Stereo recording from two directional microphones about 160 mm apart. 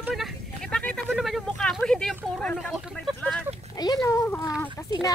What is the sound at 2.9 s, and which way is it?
Vehicle, 5° left (ahead or behind).